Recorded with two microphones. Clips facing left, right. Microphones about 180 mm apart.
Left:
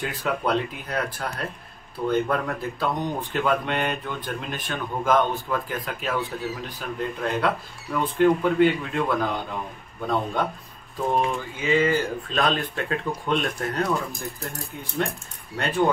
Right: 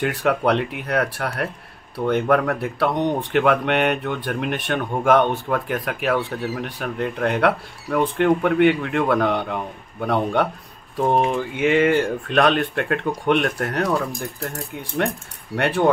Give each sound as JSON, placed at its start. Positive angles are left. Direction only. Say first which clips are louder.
{"t": 0.0, "sound": "speech", "louder": "right 6 dB", "side_deg": -70}
{"t": 15.0, "sound": "speech", "louder": "right 4 dB", "side_deg": -65}